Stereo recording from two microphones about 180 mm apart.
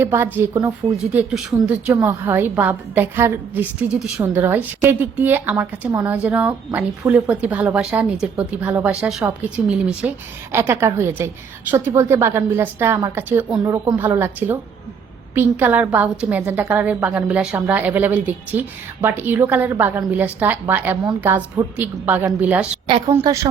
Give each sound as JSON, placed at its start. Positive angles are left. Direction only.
{"t": 0.0, "sound": "a woman's voice", "side_deg": -15}
{"t": 1.1, "sound": "a woman's voice", "side_deg": -5}
{"t": 22.9, "sound": "a woman's voice", "side_deg": -30}
{"t": 23.1, "sound": "a woman's voice", "side_deg": -15}